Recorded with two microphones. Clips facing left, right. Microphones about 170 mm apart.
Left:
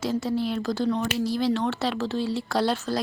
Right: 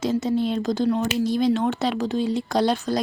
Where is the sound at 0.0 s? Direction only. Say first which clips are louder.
Right 4 dB; 20° right (ahead or behind).